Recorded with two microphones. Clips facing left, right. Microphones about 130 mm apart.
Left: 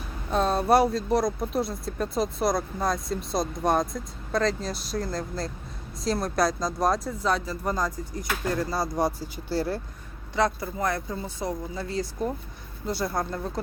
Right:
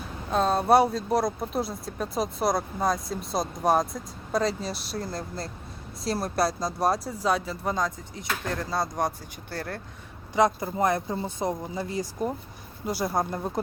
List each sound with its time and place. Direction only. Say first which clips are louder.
0.3 s speech: right 1 dB; centre (ahead or behind)
10.3 s speech: right 3 dB; 20° right (ahead or behind)